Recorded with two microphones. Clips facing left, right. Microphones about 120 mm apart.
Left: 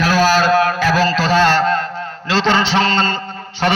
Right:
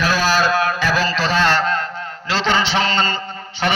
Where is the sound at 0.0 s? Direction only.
45° left (ahead or behind).